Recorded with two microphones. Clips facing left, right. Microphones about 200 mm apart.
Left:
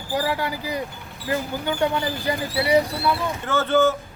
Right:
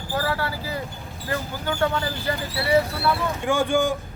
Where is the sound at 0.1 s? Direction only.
15° left (ahead or behind).